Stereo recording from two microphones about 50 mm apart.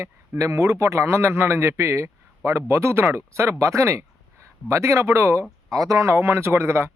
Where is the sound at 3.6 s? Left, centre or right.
Right.